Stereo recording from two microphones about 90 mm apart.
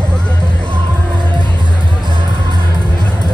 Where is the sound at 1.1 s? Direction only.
55° right (ahead or behind).